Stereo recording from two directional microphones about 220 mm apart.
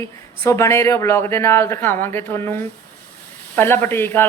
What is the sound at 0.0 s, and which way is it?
Speech, 15° left (ahead or behind).